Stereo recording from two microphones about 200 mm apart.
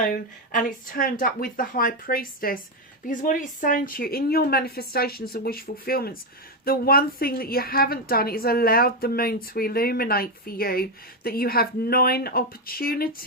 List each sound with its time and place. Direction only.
0.0 s a woman's voice: 45° left (ahead or behind)